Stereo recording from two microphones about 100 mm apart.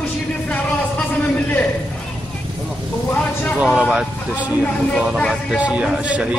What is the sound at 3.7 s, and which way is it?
Speech, 10° right (ahead or behind).